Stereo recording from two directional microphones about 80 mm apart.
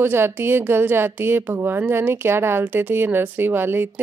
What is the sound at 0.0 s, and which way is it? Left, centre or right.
A woman's voice, right.